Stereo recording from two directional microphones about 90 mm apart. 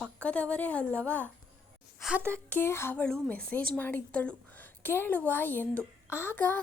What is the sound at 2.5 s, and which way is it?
Speech, 25° left (ahead or behind).